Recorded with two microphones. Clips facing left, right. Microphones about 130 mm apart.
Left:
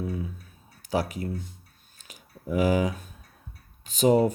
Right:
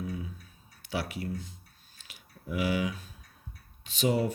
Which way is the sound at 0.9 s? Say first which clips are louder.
Left 6 dB; 40° left (ahead or behind).